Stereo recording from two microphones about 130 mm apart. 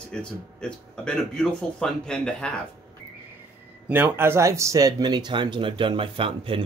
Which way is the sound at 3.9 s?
15° right (ahead or behind).